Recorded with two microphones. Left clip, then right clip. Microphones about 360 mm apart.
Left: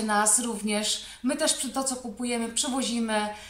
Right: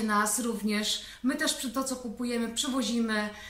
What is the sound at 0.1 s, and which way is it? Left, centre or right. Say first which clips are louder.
A woman's voice: left 4 dB; centre.